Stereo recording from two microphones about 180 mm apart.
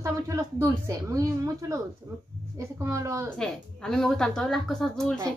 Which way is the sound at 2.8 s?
15° right (ahead or behind).